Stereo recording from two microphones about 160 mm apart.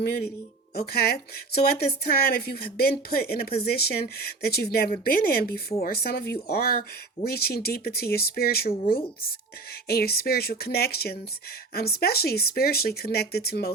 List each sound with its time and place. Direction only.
0.8 s speech: 75° left (ahead or behind)